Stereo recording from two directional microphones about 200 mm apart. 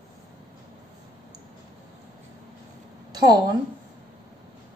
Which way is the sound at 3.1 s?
20° right (ahead or behind).